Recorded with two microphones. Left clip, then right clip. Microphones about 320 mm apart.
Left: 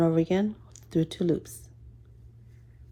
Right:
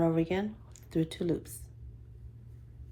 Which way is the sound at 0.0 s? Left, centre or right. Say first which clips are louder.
Left 5 dB; left.